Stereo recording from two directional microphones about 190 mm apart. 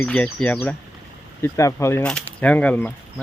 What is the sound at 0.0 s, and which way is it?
Speech, 5° left (ahead or behind).